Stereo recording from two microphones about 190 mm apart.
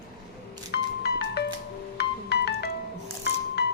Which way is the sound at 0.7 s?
65° left (ahead or behind).